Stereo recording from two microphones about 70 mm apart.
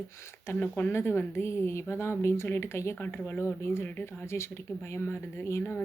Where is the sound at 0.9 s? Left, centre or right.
Left.